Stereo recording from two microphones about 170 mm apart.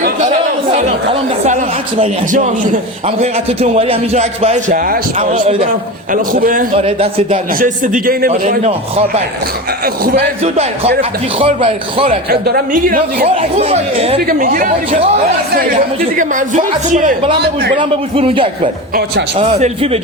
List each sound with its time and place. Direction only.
3.2 s a man's voice: 35° right (ahead or behind)
4.7 s a man's voice: 55° right (ahead or behind)
5.3 s a man's voice: 35° right (ahead or behind)
6.1 s a woman's voice: 55° right (ahead or behind)
6.7 s a man's voice: 35° right (ahead or behind)
7.6 s a man's voice: 55° right (ahead or behind)
8.3 s a man's voice: 40° right (ahead or behind)
9.8 s a man's voice: 60° right (ahead or behind)
10.4 s a man's voice: 40° right (ahead or behind)
12.0 s a man's voice: 55° right (ahead or behind)
13.2 s a man's voice: 35° right (ahead or behind)
14.3 s a man's voice: 60° right (ahead or behind)
16.1 s a woman's voice: 50° right (ahead or behind)
17.7 s a man's voice: 35° right (ahead or behind)